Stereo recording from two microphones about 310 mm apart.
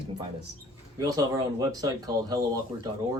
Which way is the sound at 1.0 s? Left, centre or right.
Centre.